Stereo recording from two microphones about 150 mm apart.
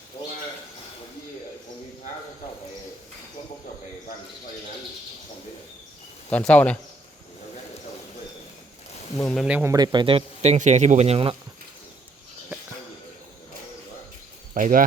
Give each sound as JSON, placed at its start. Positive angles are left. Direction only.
{"t": 6.3, "sound": "speech", "side_deg": 10}
{"t": 9.1, "sound": "speech", "side_deg": 0}
{"t": 9.5, "sound": "speech", "side_deg": -10}
{"t": 9.7, "sound": "speech", "side_deg": -30}
{"t": 14.5, "sound": "speech", "side_deg": -65}